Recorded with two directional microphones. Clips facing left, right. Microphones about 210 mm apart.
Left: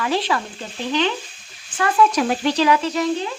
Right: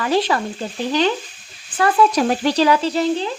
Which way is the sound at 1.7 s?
35° right (ahead or behind).